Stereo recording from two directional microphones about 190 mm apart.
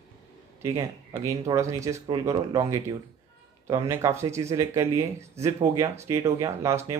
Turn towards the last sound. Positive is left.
turn(degrees=-15)  # may be behind; listen again after turning